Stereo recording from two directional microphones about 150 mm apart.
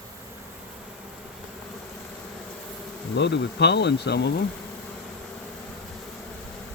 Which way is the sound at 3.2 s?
90° left.